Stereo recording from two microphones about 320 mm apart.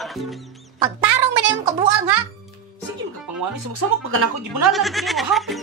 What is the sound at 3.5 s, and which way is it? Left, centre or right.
Speech, right.